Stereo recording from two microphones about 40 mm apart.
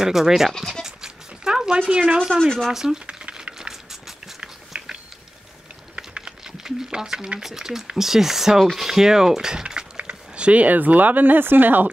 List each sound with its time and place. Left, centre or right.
0.0 s speech: centre
0.5 s speech: centre
0.8 s goat: centre
1.7 s speech: right
2.3 s speech: centre
2.7 s speech: centre
3.1 s a sound: right
3.5 s a sound: centre
5.9 s a sound: centre
7.4 s speech: centre; by 11.9 s right